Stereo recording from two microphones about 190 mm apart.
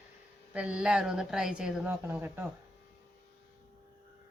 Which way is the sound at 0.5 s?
5° right (ahead or behind).